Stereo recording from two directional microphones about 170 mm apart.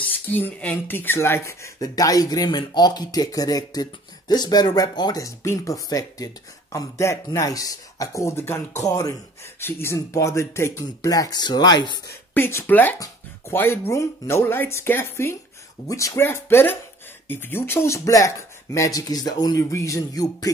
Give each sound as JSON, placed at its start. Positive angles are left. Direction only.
{"t": 0.3, "sound": "speech", "side_deg": 10}
{"t": 12.4, "sound": "speech", "side_deg": 15}